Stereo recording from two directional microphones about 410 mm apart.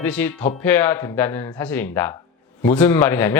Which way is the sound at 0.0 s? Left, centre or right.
Centre.